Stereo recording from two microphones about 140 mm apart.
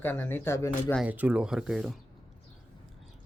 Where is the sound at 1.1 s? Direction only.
10° right (ahead or behind).